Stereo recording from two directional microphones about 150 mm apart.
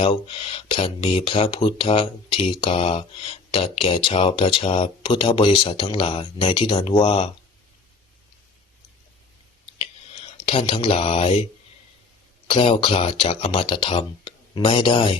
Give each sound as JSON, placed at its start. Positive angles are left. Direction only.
{"t": 0.0, "sound": "speech", "side_deg": 35}
{"t": 10.3, "sound": "speech", "side_deg": 40}
{"t": 12.5, "sound": "speech", "side_deg": 35}